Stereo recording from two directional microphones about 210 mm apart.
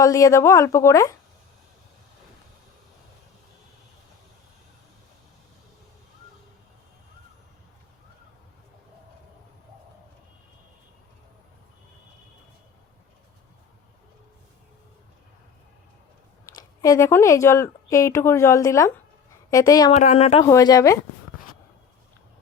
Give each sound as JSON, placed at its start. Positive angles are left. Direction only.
{"t": 0.0, "sound": "speech", "side_deg": 15}
{"t": 16.6, "sound": "speech", "side_deg": 15}
{"t": 19.9, "sound": "speech", "side_deg": 35}
{"t": 20.4, "sound": "speech", "side_deg": 15}